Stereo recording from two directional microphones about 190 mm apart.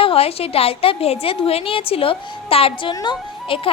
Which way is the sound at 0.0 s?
30° left (ahead or behind).